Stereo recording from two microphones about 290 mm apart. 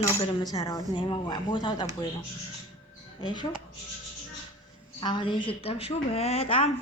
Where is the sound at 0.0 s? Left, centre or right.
Centre.